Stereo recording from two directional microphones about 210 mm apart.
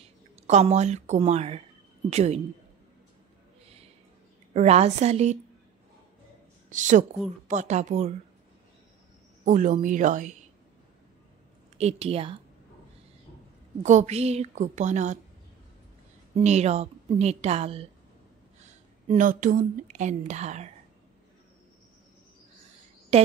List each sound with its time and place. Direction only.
0.0 s a woman's voice: 30° right (ahead or behind)
4.6 s a woman's voice: 30° right (ahead or behind)
6.7 s a woman's voice: 35° right (ahead or behind)
9.4 s a woman's voice: 35° right (ahead or behind)
11.8 s a woman's voice: 30° right (ahead or behind)
13.8 s a woman's voice: 35° right (ahead or behind)
16.3 s a woman's voice: 30° right (ahead or behind)
23.1 s speech: 30° right (ahead or behind)